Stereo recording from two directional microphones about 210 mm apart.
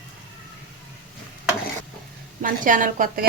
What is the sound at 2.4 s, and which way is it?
Speech, 40° right (ahead or behind).